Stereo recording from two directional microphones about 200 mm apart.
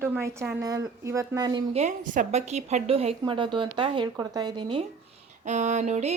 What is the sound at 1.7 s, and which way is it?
A woman's voice, 35° right (ahead or behind).